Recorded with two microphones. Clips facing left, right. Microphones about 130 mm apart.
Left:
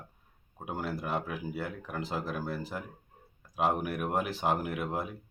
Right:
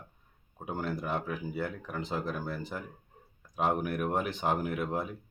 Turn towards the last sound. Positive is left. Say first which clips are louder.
# right 1 dB
turn(degrees=5)  # may be behind; listen again after turning